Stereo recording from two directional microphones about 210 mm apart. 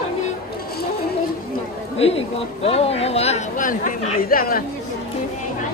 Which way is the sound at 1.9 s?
30° left (ahead or behind).